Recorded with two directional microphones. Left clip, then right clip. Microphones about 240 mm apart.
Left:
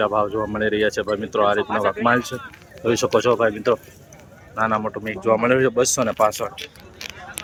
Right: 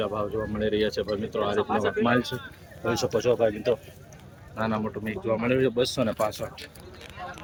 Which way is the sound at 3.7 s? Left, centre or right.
Left.